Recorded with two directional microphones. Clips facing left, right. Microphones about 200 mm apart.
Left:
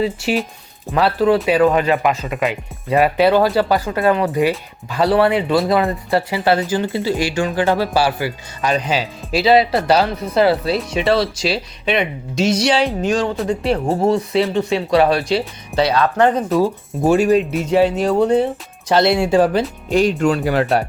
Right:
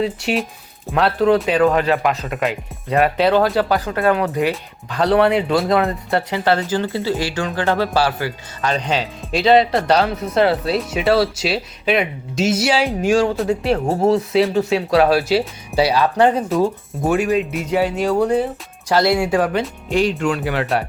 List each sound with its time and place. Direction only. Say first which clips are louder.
0.0 s speech: left 1 dB; centre (ahead or behind)
16.5 s speech: left 1 dB; centre (ahead or behind)
17.0 s speech: left 4 dB; 30° left (ahead or behind)
19.9 s speech: left 3 dB; 40° left (ahead or behind)